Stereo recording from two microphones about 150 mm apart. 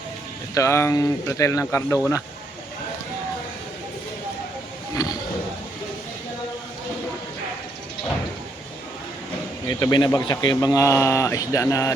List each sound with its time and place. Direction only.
0.5 s speech: 20° left (ahead or behind)
5.0 s speech: 25° left (ahead or behind)
9.6 s speech: 30° left (ahead or behind)